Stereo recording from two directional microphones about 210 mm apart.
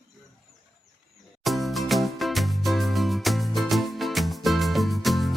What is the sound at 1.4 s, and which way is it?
Music, centre (ahead or behind).